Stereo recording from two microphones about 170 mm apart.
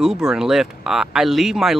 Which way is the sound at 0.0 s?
5° right (ahead or behind).